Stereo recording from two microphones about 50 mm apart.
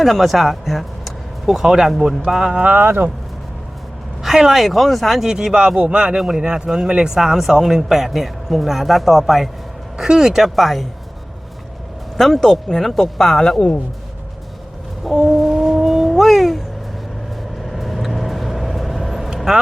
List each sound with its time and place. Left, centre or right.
0.0 s speech: centre
2.5 s speech: right
2.7 s speech: right
4.2 s speech: centre
5.2 s speech: centre
10.5 s speech: centre
12.1 s speech: centre
15.1 s speech: centre
15.4 s cat: centre
17.7 s vehicle: centre